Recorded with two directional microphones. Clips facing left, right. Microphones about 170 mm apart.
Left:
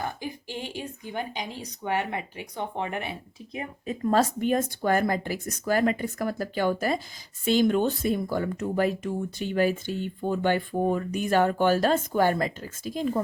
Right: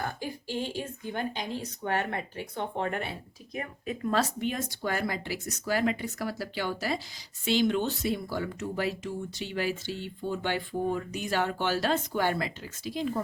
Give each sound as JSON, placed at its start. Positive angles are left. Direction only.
{"t": 0.0, "sound": "speech", "side_deg": 15}
{"t": 3.8, "sound": "speech", "side_deg": 45}